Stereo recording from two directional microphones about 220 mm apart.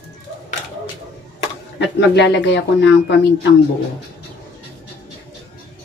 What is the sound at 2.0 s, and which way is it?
Speech, 50° left (ahead or behind).